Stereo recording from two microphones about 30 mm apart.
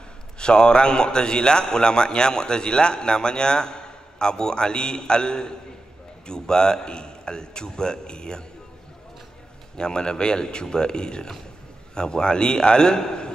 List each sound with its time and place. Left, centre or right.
0.4 s a man's voice: left
9.8 s a man's voice: left